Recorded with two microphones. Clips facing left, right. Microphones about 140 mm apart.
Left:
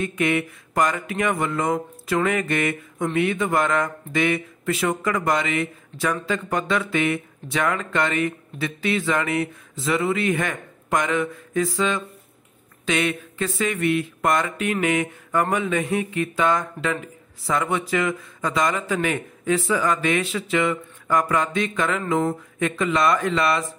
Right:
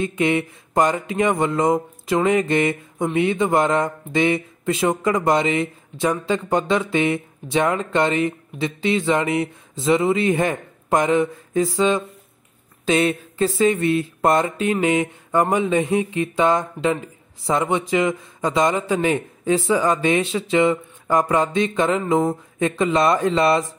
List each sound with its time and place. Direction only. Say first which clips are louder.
0.0 s speech: right 2 dB; 25° right (ahead or behind)